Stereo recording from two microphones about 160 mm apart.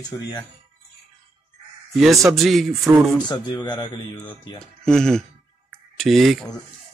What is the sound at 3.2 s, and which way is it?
Speech, 25° left (ahead or behind).